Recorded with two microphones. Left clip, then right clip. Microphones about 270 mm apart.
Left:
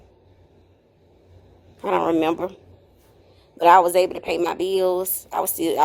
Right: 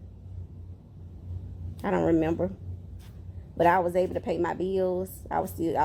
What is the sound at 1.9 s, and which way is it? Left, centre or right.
Speech, left.